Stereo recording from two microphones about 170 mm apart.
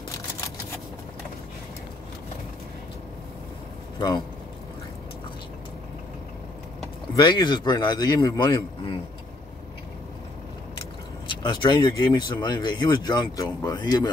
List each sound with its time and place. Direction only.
7.2 s speech: 25° left (ahead or behind)
11.2 s speech: 30° left (ahead or behind)